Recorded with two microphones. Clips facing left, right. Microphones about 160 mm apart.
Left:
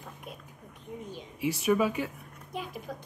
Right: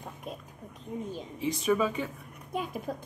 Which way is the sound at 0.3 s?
40° right (ahead or behind).